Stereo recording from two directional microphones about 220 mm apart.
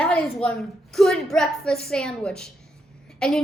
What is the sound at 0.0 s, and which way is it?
A woman's voice, 5° left (ahead or behind).